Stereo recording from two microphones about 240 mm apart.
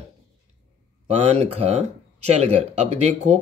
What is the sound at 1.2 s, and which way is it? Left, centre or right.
Speech, right.